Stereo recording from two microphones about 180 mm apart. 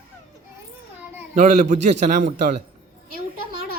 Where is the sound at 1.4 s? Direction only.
45° right (ahead or behind).